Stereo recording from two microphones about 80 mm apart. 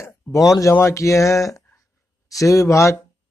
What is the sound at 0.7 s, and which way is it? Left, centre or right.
Speech, left.